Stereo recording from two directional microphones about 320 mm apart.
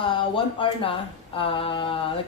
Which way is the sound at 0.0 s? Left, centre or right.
Centre.